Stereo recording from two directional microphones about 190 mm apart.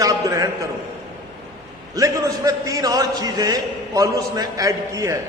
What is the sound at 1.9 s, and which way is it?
A man's voice, 20° right (ahead or behind).